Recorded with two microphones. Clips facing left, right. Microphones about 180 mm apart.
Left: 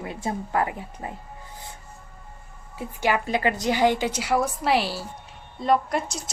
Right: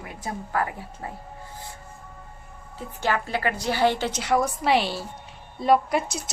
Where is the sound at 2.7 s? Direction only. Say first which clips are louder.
Left 2 dB; 15° left (ahead or behind).